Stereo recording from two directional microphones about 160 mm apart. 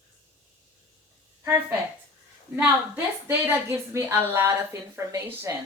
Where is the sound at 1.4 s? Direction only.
15° right (ahead or behind).